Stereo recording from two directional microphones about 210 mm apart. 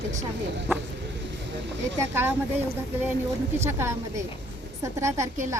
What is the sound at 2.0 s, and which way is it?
A woman's voice, 10° right (ahead or behind).